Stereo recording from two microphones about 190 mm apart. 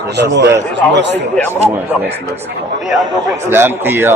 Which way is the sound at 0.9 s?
65° right (ahead or behind).